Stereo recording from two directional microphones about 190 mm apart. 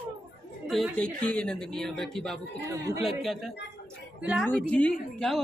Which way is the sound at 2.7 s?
15° right (ahead or behind).